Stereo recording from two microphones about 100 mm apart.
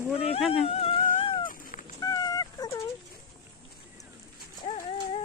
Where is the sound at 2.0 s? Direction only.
40° left (ahead or behind).